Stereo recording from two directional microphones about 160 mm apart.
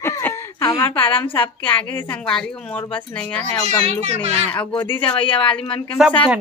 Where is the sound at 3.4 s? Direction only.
40° right (ahead or behind).